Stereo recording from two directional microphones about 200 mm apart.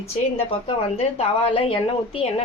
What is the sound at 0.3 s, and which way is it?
A woman's voice, 30° left (ahead or behind).